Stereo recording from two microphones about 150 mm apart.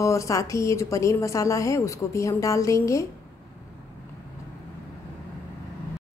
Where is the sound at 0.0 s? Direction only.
20° left (ahead or behind).